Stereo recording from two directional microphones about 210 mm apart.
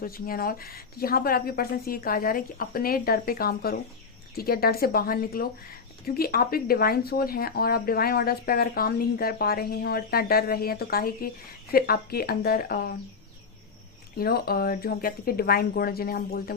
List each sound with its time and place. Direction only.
0.0 s speech: 45° left (ahead or behind)
14.2 s speech: 45° left (ahead or behind)